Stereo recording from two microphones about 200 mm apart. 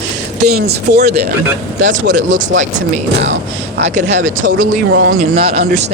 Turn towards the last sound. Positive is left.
turn(degrees=-65)  # may be behind; listen again after turning